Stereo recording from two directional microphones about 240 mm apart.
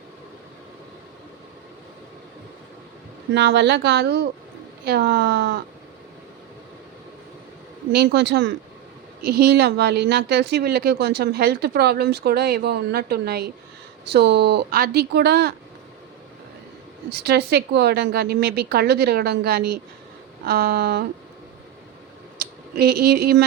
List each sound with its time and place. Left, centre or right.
3.3 s a woman's voice: right
7.9 s a woman's voice: right
17.2 s a woman's voice: right
22.4 s speech: right